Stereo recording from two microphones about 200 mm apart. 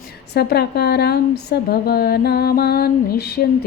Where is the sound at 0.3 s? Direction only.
55° left (ahead or behind).